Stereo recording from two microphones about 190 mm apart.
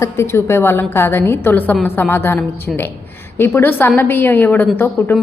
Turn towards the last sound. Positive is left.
turn(degrees=10)  # may be behind; listen again after turning